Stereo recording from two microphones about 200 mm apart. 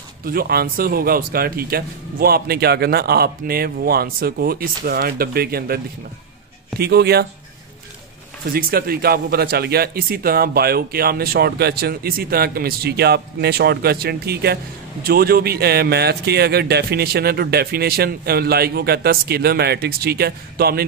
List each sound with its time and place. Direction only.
0.2 s speech: 50° right (ahead or behind)
6.8 s speech: 55° right (ahead or behind)
8.5 s speech: 50° right (ahead or behind)